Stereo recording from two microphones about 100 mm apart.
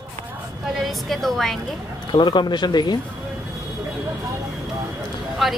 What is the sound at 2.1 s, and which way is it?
Speech, 50° left (ahead or behind).